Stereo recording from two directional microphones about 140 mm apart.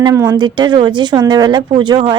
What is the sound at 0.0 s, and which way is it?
A woman's voice, 25° right (ahead or behind).